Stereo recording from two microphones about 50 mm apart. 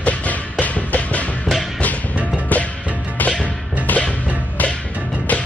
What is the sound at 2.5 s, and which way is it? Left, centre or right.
Music, left.